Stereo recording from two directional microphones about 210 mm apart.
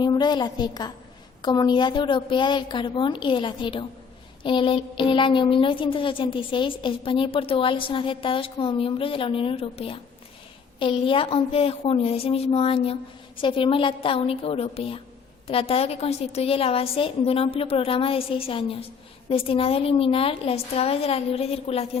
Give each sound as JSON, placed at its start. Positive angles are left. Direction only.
{"t": 0.0, "sound": "a woman's voice", "side_deg": 20}